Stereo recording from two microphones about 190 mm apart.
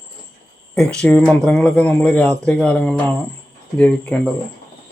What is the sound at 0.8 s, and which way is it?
Speech, 5° left (ahead or behind).